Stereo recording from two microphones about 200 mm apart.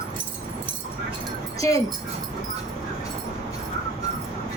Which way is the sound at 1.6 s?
15° left (ahead or behind).